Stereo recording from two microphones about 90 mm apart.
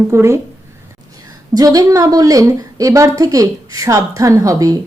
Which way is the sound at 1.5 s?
40° right (ahead or behind).